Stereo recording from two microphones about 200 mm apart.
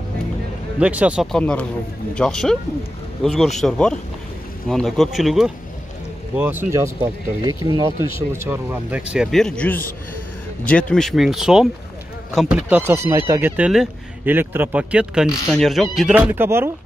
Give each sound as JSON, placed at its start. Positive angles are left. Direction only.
{"t": 0.7, "sound": "speech", "side_deg": -5}